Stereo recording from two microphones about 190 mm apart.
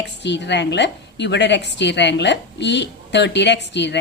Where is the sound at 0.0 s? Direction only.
65° left (ahead or behind).